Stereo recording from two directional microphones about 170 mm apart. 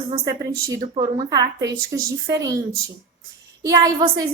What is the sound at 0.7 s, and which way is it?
A woman's voice, 25° right (ahead or behind).